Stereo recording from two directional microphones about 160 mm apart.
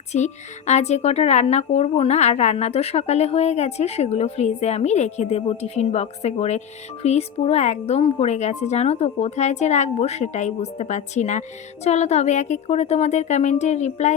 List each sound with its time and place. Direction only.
0.1 s speech: 45° left (ahead or behind)